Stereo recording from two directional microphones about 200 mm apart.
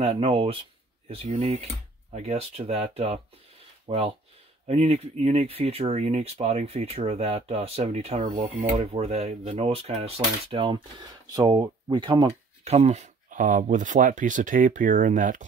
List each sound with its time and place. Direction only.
0.0 s speech: 30° right (ahead or behind)